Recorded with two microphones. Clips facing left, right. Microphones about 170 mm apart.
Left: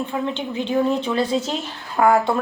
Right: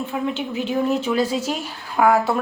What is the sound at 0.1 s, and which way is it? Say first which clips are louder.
A woman's voice: even; 5° right (ahead or behind).